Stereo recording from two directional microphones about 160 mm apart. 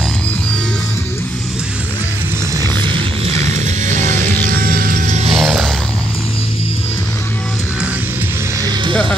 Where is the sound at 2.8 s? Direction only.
30° right (ahead or behind).